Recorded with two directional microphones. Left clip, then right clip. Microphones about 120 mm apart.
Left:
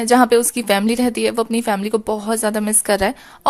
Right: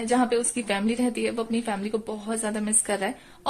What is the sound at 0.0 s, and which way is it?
A woman's voice, 40° left (ahead or behind).